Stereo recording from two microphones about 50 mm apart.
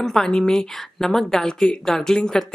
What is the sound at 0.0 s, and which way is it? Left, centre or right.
Speech, centre.